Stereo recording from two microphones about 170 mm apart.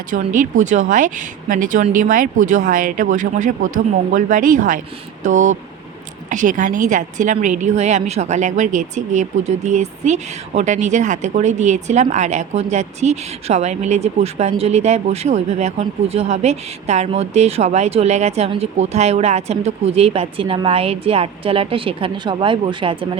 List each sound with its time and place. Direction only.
0.3 s a woman's voice: 45° right (ahead or behind); by 23.0 s 30° right (ahead or behind)